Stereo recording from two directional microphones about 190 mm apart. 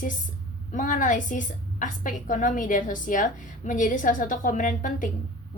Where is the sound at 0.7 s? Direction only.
45° left (ahead or behind).